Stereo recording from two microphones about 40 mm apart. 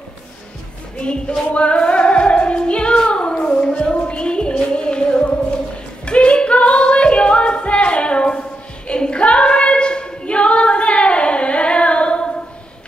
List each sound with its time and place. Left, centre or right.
0.9 s speech: left
1.5 s music: left